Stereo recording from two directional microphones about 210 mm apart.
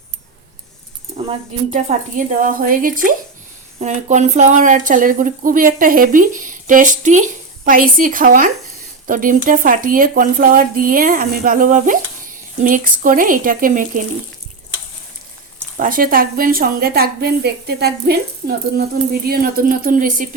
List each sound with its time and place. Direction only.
1.1 s speech: 30° right (ahead or behind)
15.8 s a woman's voice: 40° right (ahead or behind)